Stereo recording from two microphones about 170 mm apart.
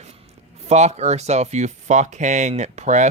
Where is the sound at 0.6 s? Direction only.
40° right (ahead or behind).